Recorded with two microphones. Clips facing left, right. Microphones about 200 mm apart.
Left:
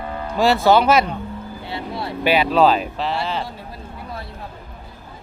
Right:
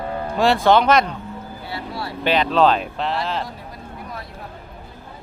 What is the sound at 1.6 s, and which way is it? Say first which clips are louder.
Speech: left 2 dB; 20° left (ahead or behind).